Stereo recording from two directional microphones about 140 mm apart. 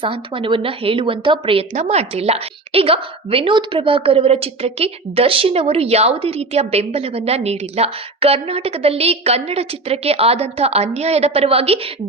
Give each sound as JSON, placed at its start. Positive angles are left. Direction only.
{"t": 0.0, "sound": "a woman's voice", "side_deg": -40}
{"t": 1.7, "sound": "a woman's voice", "side_deg": -50}